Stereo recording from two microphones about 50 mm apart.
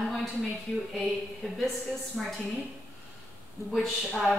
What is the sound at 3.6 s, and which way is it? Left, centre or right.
Speech, left.